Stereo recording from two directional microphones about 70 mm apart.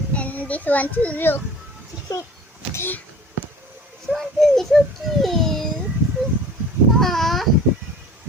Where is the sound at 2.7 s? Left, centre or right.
Left.